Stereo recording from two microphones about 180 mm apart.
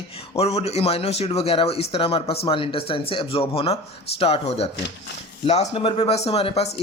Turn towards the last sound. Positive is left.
turn(degrees=35)  # may be behind; listen again after turning